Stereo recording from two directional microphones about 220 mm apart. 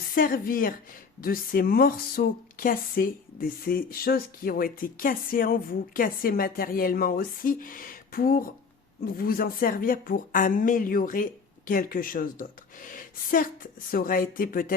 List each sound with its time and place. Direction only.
0.1 s a woman's voice: 40° left (ahead or behind)